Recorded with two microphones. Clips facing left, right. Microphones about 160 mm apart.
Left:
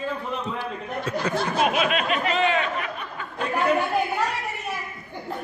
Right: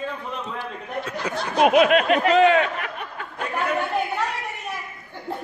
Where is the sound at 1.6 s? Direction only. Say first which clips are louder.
Right 9 dB; 60° right (ahead or behind).